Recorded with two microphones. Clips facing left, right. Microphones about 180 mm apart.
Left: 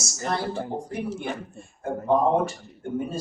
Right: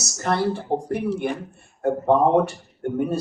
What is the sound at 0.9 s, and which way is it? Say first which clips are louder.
Speech: right 6 dB; 60° right (ahead or behind).